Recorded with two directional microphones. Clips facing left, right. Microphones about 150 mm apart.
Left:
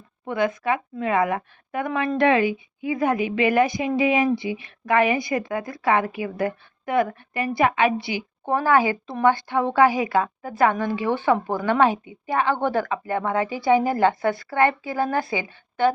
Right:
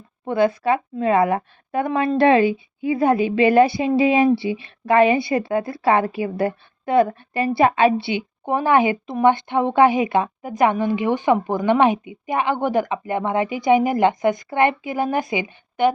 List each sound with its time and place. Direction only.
0.3 s a woman's voice: 30° right (ahead or behind)
8.4 s speech: 20° right (ahead or behind)